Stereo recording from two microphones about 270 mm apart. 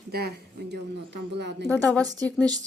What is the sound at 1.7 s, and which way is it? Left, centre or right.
Speech, centre.